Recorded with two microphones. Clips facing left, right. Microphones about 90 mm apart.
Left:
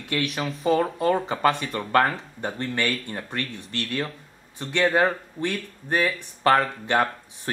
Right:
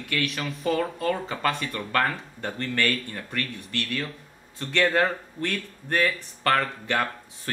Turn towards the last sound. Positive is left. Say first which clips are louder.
# left 4 dB
turn(degrees=20)  # may be behind; listen again after turning